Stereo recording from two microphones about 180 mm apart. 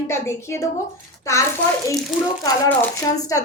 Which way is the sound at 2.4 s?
15° left (ahead or behind).